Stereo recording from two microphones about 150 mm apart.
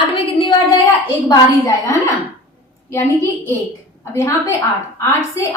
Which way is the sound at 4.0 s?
20° left (ahead or behind).